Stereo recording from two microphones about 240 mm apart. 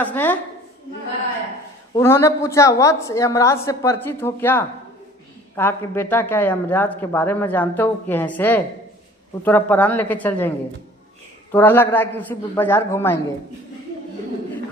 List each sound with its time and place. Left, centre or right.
0.0 s speech: centre
2.0 s speech: centre
11.5 s speech: centre